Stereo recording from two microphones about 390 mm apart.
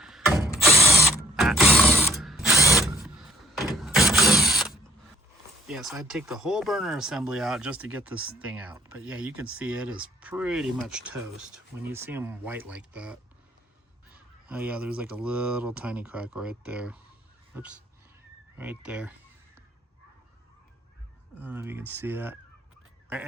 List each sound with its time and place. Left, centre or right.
0.0 s tools: centre
0.9 s mechanisms: centre
5.6 s speech: centre
14.4 s speech: centre
21.3 s speech: centre